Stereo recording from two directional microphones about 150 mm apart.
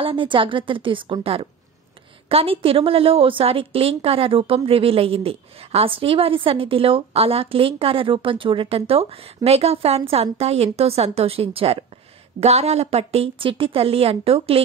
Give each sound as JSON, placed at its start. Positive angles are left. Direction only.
{"t": 0.0, "sound": "a woman's voice", "side_deg": -35}